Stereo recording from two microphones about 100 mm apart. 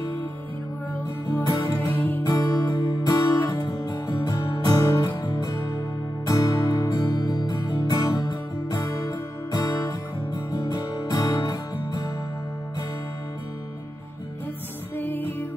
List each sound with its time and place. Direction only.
1.3 s music: 40° left (ahead or behind)
15.0 s music: 20° left (ahead or behind)